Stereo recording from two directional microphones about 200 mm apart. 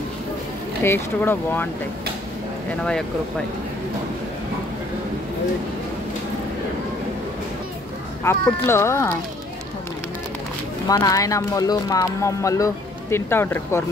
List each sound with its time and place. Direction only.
0.8 s speech: 10° left (ahead or behind)
8.2 s speech: 15° left (ahead or behind)
10.9 s speech: 15° left (ahead or behind)